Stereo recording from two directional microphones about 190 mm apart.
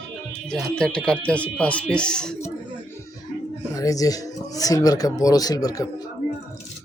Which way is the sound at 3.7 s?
20° left (ahead or behind).